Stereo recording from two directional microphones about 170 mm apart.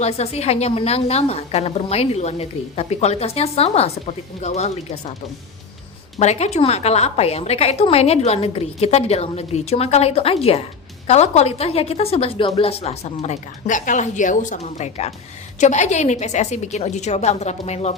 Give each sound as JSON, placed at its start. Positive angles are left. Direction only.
{"t": 0.0, "sound": "a woman's voice", "side_deg": 40}
{"t": 6.1, "sound": "a woman's voice", "side_deg": 40}